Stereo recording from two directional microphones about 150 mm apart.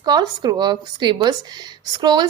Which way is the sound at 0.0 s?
30° right (ahead or behind).